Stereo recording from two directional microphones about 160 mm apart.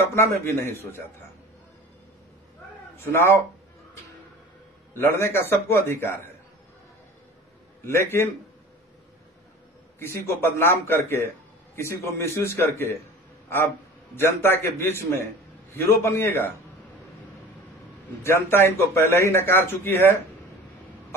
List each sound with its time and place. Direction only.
0.1 s a man's voice: 15° left (ahead or behind)
3.0 s a man's voice: 15° left (ahead or behind)
4.9 s a man's voice: 15° left (ahead or behind)
7.8 s a man's voice: 15° left (ahead or behind)
9.9 s a man's voice: 15° left (ahead or behind)
14.1 s a man's voice: 15° left (ahead or behind)
18.2 s a man's voice: 15° left (ahead or behind)